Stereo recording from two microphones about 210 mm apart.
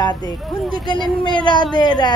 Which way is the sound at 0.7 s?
20° left (ahead or behind).